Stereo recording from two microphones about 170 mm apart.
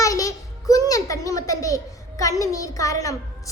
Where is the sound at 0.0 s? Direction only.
20° left (ahead or behind).